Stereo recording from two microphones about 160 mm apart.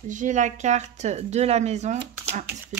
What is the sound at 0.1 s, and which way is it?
Speech, 50° right (ahead or behind).